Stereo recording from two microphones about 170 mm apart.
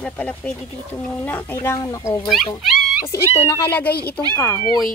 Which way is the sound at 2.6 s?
5° right (ahead or behind).